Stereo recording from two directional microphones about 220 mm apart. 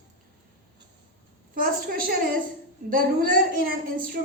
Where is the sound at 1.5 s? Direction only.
40° right (ahead or behind).